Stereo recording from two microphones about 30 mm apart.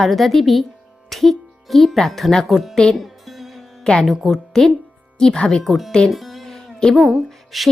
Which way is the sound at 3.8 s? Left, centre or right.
Left.